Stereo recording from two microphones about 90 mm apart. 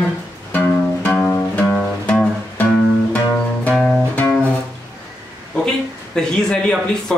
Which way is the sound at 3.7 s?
5° left (ahead or behind).